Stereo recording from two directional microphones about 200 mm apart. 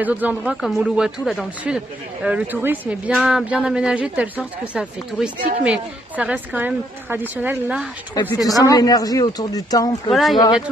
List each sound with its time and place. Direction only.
0.0 s a woman's voice: 10° right (ahead or behind)
8.1 s speech: 20° left (ahead or behind)
10.0 s speech: centre (ahead or behind)